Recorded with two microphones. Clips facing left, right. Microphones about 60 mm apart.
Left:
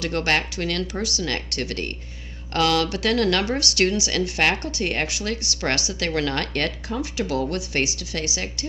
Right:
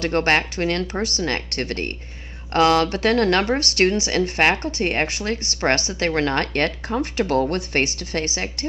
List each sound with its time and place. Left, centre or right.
0.0 s a woman's voice: right